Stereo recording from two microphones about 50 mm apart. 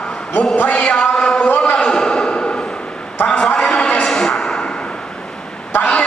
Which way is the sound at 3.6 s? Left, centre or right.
Centre.